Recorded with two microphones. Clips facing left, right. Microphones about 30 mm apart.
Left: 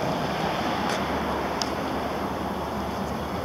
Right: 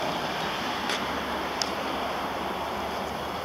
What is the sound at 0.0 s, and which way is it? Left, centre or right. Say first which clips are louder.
Vehicle: left 3 dB; centre.